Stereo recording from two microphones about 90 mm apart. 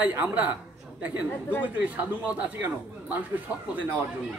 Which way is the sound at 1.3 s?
20° left (ahead or behind).